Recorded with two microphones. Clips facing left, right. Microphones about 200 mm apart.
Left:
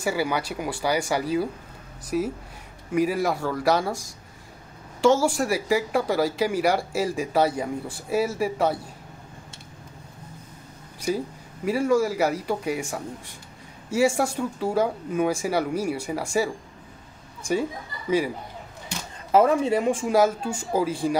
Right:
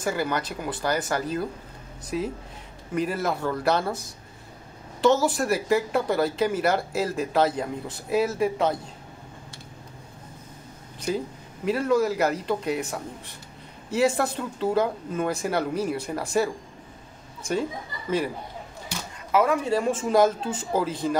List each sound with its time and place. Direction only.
0.0 s speech: 10° left (ahead or behind)
11.6 s speech: 10° left (ahead or behind)
19.3 s speech: 30° left (ahead or behind)
19.7 s speech: 15° left (ahead or behind)